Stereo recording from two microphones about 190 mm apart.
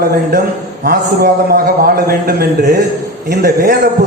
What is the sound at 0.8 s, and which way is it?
A man's voice, 55° right (ahead or behind).